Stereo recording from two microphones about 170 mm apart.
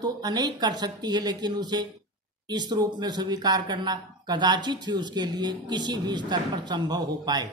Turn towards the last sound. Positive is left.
turn(degrees=-25)  # may be behind; listen again after turning